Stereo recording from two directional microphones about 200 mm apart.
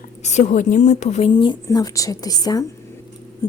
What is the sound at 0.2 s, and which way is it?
A woman's voice, 35° left (ahead or behind).